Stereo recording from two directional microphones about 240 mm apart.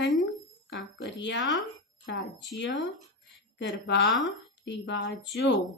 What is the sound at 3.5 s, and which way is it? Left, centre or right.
Speech, left.